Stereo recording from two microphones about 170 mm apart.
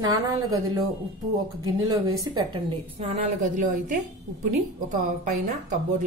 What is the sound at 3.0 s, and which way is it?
A woman's voice, 45° right (ahead or behind).